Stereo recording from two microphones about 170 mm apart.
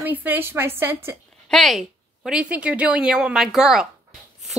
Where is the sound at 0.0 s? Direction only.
10° right (ahead or behind).